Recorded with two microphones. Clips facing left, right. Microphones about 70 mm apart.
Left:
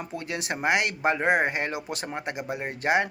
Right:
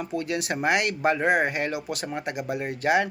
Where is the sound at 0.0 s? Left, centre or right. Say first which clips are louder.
Right 5 dB; left.